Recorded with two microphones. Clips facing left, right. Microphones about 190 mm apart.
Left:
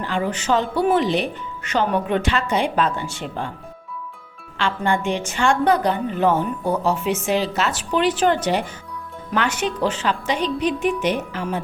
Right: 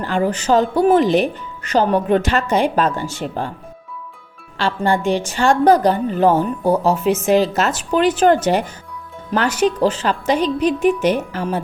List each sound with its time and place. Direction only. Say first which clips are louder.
0.0 s a woman's voice: right 5 dB; 40° right (ahead or behind)
4.5 s a woman's voice: right 3 dB; 35° right (ahead or behind)